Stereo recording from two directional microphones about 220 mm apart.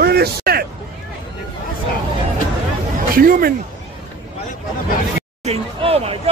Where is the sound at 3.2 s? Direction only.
40° right (ahead or behind).